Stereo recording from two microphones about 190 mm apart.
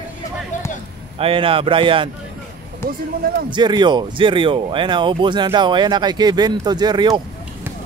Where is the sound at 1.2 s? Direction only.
30° right (ahead or behind).